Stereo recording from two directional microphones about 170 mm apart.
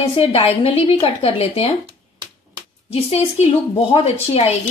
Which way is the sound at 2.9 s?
35° left (ahead or behind).